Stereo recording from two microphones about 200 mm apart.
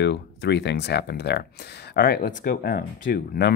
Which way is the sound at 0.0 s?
60° left (ahead or behind).